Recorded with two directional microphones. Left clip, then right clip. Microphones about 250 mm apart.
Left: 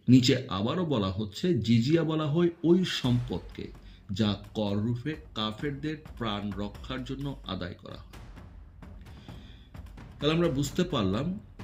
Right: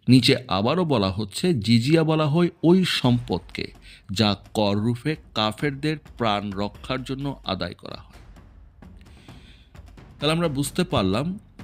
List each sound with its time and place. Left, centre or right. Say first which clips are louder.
0.0 s speech: right 5 dB; right
10.2 s speech: right 4 dB; right